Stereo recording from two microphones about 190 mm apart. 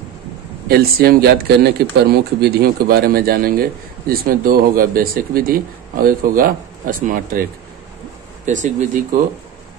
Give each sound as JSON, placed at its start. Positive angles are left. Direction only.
{"t": 0.7, "sound": "speech", "side_deg": -50}
{"t": 8.5, "sound": "speech", "side_deg": -40}